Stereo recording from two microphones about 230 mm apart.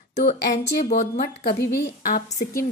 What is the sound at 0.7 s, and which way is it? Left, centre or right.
A woman's voice, left.